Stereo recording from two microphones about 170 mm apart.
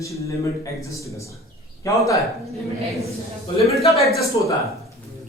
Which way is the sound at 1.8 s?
20° left (ahead or behind).